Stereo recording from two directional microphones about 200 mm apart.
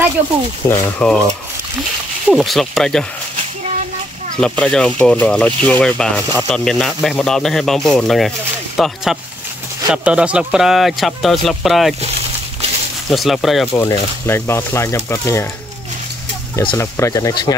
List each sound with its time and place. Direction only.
0.7 s speech: 5° left (ahead or behind)
2.3 s speech: centre (ahead or behind)
4.4 s speech: 5° left (ahead or behind)
13.1 s speech: centre (ahead or behind)
13.7 s speech: 15° left (ahead or behind)
16.5 s speech: 15° left (ahead or behind)